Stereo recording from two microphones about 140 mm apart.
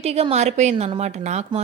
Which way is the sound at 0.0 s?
45° right (ahead or behind).